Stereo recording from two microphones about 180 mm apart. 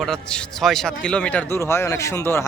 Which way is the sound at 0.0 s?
5° left (ahead or behind).